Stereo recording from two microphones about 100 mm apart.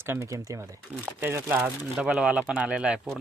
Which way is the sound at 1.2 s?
20° right (ahead or behind).